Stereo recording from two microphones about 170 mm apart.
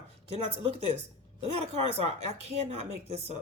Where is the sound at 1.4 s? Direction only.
40° right (ahead or behind).